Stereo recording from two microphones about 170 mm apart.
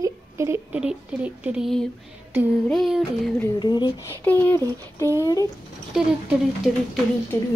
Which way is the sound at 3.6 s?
25° left (ahead or behind).